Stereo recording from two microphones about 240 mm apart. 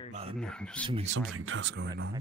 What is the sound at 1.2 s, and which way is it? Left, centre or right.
Speech, right.